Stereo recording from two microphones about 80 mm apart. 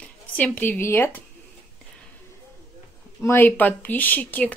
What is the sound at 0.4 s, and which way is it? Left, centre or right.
Speech, left.